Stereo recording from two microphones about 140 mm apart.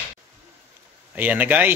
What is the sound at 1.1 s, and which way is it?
Speech, 10° right (ahead or behind).